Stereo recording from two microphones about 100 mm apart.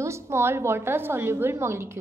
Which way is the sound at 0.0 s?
25° right (ahead or behind).